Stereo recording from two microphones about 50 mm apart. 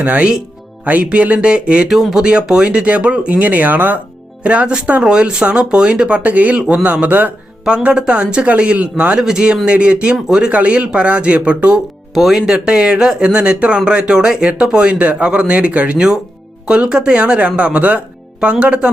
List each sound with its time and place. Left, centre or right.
0.0 s speech: right
1.9 s speech: centre
2.1 s speech: centre; by 4.0 s right
4.4 s speech: right
7.6 s a man's voice: centre
10.5 s speech: right
12.1 s speech: centre
12.5 s speech: centre